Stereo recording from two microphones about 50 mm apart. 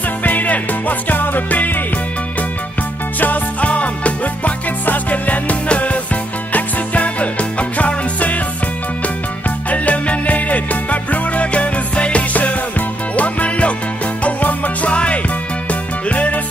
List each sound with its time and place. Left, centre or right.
0.2 s music: left
3.2 s music: left
9.7 s music: left